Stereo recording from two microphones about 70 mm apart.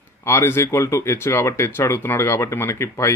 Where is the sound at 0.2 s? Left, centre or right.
Left.